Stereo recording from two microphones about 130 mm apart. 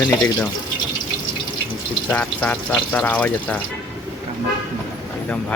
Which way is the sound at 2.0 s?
10° left (ahead or behind).